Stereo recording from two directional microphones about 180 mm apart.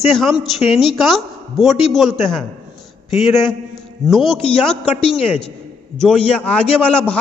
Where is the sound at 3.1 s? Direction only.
Centre (ahead or behind).